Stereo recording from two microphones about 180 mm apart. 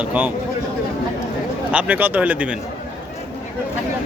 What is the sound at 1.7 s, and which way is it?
Speech, 10° right (ahead or behind).